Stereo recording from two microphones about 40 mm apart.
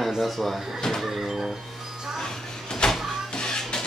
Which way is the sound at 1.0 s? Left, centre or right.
Centre.